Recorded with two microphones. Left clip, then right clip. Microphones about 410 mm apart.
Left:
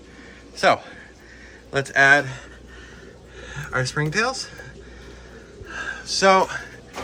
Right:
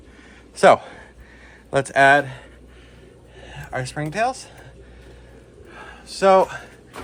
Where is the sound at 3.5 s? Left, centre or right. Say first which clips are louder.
Left 3 dB; centre.